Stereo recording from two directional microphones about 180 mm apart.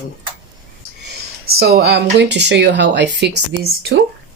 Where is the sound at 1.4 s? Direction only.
60° right (ahead or behind).